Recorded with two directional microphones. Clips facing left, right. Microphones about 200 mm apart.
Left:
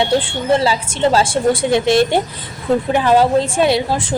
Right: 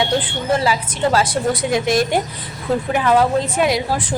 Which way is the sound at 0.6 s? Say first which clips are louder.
Left 3 dB; 30° left (ahead or behind).